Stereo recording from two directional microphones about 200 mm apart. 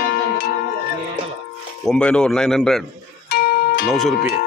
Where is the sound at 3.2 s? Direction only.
55° left (ahead or behind).